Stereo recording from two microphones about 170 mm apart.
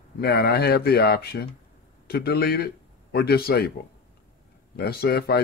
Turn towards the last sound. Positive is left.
turn(degrees=65)  # may be behind; listen again after turning